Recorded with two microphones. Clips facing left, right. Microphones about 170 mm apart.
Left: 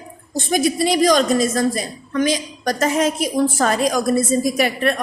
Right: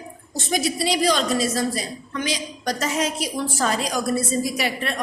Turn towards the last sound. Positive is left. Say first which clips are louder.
# left 6 dB
turn(degrees=50)  # may be behind; listen again after turning